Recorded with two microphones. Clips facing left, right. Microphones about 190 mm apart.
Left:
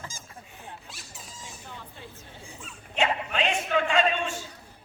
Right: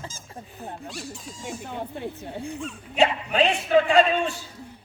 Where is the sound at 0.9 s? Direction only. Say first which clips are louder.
Right 11 dB; centre (ahead or behind).